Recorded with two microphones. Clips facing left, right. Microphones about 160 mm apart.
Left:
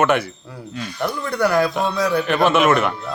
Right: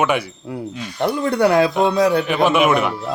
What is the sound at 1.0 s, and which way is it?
Speech, 25° right (ahead or behind).